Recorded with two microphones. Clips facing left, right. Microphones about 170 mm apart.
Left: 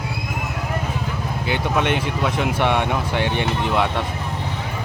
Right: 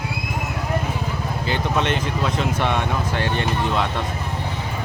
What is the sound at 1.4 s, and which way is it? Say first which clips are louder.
Speech: left 1 dB; 10° left (ahead or behind).